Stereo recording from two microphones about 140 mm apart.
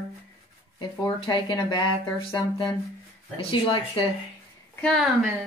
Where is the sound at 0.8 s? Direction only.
35° left (ahead or behind).